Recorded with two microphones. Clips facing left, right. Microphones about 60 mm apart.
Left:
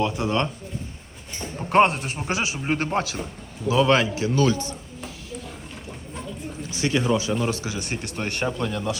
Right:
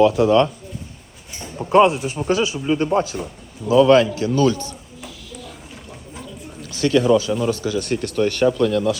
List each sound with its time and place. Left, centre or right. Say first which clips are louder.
0.0 s speech: right 10 dB; centre
0.3 s speech: right 9 dB; centre
1.7 s speech: right 4 dB; left
2.2 s speech: right 9 dB; centre
2.6 s speech: right 5 dB; left
3.9 s speech: right 6 dB; left
6.6 s a sound: right 7 dB; centre
7.1 s speech: right 6 dB; left
7.8 s speech: right 8 dB; centre
8.1 s speech: right 10 dB; left; by 9.0 s centre